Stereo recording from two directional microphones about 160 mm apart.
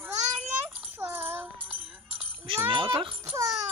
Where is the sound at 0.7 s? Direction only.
10° right (ahead or behind).